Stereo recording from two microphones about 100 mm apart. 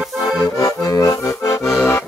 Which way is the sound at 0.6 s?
35° left (ahead or behind).